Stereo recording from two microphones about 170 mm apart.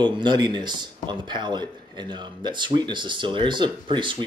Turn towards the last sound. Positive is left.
turn(degrees=-30)  # may be behind; listen again after turning